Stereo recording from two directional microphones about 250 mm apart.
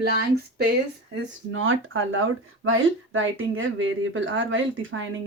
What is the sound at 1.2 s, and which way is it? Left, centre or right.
Speech, right.